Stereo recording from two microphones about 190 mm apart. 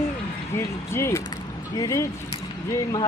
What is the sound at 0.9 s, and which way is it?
Speech, 15° left (ahead or behind).